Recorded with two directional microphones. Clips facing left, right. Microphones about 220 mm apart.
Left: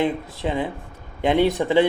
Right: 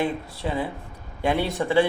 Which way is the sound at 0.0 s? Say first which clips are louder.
Left 3 dB; 20° left (ahead or behind).